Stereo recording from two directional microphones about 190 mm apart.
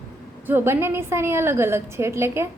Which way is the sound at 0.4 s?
10° right (ahead or behind).